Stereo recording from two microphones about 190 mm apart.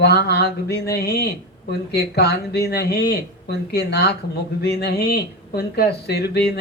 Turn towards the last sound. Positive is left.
turn(degrees=60)  # may be behind; listen again after turning